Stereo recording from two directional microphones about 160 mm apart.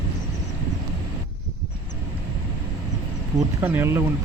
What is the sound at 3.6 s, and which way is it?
Speech, 15° right (ahead or behind).